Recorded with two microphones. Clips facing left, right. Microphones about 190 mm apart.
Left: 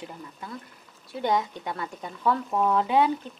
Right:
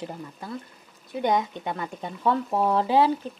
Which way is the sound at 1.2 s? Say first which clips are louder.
Right 2 dB; 20° right (ahead or behind).